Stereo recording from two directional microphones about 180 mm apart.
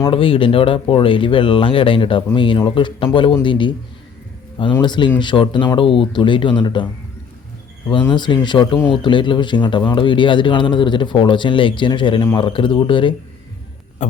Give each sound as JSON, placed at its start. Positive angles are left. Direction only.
{"t": 0.0, "sound": "speech", "side_deg": 30}
{"t": 4.8, "sound": "speech", "side_deg": 25}
{"t": 8.1, "sound": "speech", "side_deg": 25}
{"t": 14.0, "sound": "a sound", "side_deg": 40}